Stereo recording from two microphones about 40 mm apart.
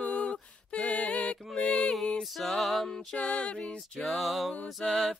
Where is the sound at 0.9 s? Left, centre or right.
Left.